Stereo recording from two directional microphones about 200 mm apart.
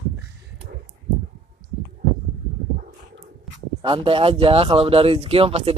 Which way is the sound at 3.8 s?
25° right (ahead or behind).